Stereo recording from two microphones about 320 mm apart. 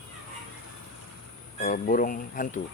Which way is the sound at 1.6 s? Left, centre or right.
Left.